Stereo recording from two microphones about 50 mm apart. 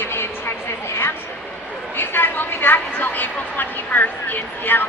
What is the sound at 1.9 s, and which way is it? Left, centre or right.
A woman's voice, left.